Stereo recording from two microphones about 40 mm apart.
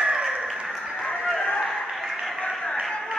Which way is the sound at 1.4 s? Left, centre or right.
Left.